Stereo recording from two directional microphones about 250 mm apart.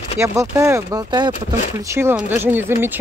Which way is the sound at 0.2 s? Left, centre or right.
Centre.